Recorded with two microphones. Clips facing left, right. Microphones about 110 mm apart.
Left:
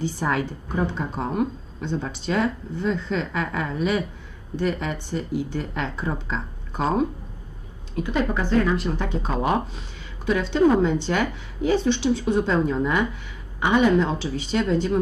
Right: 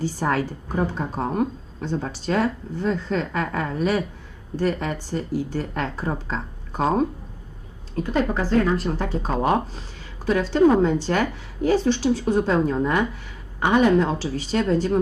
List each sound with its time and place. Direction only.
0.0 s a woman's voice: 40° right (ahead or behind)